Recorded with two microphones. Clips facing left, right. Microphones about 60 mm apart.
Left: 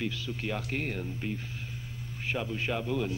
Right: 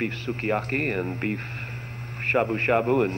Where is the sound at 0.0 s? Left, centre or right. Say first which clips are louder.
Right 6 dB; right.